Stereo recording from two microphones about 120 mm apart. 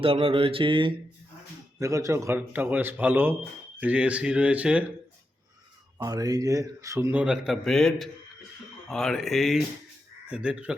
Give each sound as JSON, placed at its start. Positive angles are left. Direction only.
{"t": 0.0, "sound": "mantra", "side_deg": -50}
{"t": 1.8, "sound": "a man's voice", "side_deg": -25}
{"t": 6.0, "sound": "speech", "side_deg": -30}
{"t": 7.1, "sound": "a man's voice", "side_deg": -10}